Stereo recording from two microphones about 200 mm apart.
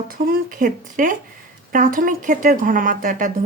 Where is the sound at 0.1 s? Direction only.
50° right (ahead or behind).